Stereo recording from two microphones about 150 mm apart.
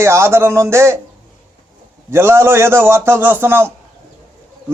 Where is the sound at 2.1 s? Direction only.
15° right (ahead or behind).